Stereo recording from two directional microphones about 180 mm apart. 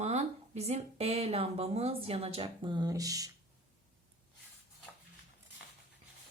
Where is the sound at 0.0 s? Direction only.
35° right (ahead or behind); by 3.3 s 20° right (ahead or behind).